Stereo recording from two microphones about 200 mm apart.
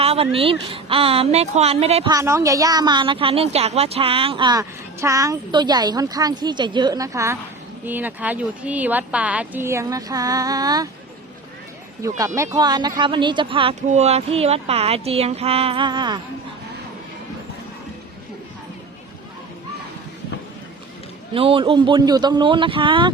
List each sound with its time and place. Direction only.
0.0 s a sound: 30° right (ahead or behind)
0.3 s a woman's voice: 30° right (ahead or behind)
2.1 s a woman's voice: 15° right (ahead or behind)
12.0 s a woman's voice: 15° right (ahead or behind)
21.3 s a woman's voice: 25° right (ahead or behind)